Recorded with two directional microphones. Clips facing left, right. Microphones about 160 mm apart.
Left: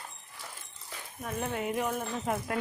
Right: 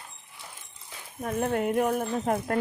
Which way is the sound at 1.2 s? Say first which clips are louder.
Right 7 dB; 55° right (ahead or behind).